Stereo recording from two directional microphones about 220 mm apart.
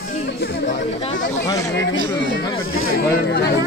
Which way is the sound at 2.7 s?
40° left (ahead or behind).